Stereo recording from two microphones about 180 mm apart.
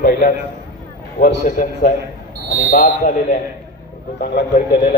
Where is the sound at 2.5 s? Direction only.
45° left (ahead or behind).